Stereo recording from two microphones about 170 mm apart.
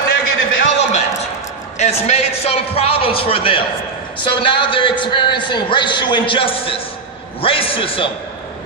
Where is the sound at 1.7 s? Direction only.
40° left (ahead or behind).